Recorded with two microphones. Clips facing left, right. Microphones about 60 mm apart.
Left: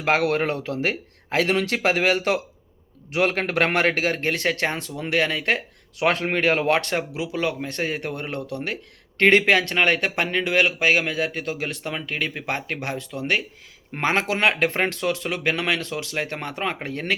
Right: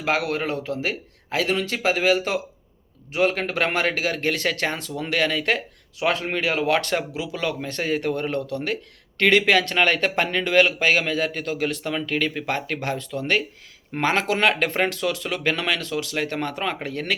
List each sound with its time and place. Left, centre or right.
0.0 s speech: left
4.2 s speech: left
6.0 s speech: left
6.7 s a man's voice: left